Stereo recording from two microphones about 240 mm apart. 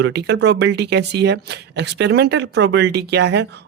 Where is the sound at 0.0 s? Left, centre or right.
Right.